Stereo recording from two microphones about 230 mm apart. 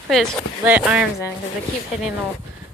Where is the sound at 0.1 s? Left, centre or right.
Centre.